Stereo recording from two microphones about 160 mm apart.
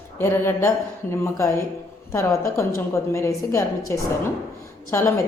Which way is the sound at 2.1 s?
15° left (ahead or behind).